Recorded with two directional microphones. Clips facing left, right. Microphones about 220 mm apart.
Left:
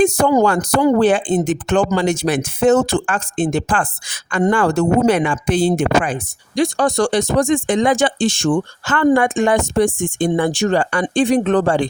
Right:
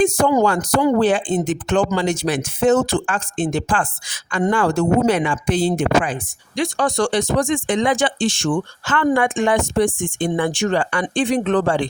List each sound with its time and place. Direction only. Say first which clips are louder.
0.0 s speech: left 2 dB; 45° left (ahead or behind)